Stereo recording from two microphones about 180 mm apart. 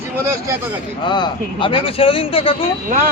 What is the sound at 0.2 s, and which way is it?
Speech, 15° right (ahead or behind).